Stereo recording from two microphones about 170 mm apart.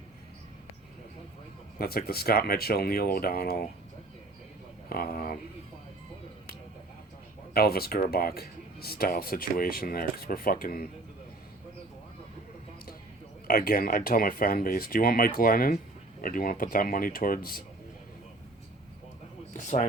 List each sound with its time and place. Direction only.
1.8 s speech: 60° left (ahead or behind)
4.9 s speech: 60° left (ahead or behind)
7.5 s speech: 65° left (ahead or behind)
13.5 s speech: 60° left (ahead or behind)
19.5 s speech: 45° left (ahead or behind)